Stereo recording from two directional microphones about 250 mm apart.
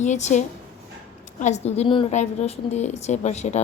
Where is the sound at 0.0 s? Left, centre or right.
Left.